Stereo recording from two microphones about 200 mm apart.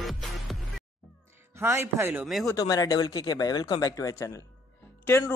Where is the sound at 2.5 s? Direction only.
15° left (ahead or behind).